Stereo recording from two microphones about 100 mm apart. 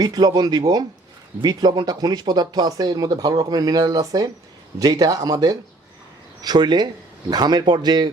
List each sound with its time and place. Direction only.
0.0 s speech: 45° right (ahead or behind)